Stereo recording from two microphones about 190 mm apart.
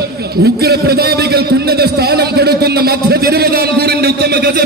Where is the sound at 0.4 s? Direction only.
55° right (ahead or behind).